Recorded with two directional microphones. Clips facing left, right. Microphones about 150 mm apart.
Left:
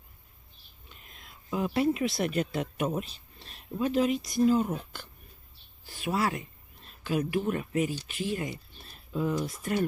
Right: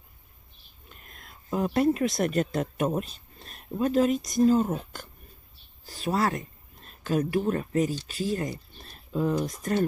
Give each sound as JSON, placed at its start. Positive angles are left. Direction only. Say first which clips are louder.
{"t": 0.8, "sound": "speech", "louder": "right 3 dB", "side_deg": -45}